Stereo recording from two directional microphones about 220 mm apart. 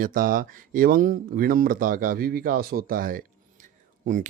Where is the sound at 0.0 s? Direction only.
40° right (ahead or behind).